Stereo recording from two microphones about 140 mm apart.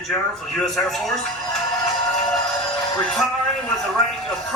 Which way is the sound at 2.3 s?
5° left (ahead or behind).